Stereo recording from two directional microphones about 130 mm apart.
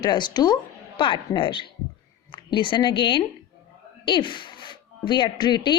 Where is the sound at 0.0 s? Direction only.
35° left (ahead or behind).